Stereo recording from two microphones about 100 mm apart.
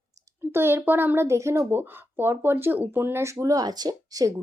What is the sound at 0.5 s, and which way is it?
Speech, 25° right (ahead or behind).